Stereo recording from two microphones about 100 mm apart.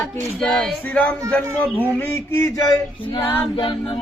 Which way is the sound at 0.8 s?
15° left (ahead or behind).